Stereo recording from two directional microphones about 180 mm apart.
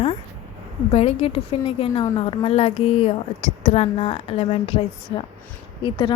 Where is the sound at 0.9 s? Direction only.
35° left (ahead or behind).